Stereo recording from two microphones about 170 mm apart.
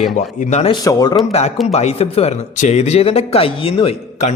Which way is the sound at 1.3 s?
40° left (ahead or behind).